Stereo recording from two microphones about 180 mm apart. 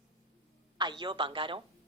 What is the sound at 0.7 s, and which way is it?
Speech, 25° right (ahead or behind).